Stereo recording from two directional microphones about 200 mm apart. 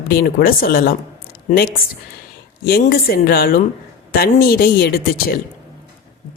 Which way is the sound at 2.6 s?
45° left (ahead or behind).